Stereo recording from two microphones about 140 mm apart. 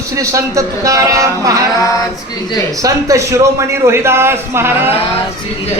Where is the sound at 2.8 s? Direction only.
25° right (ahead or behind).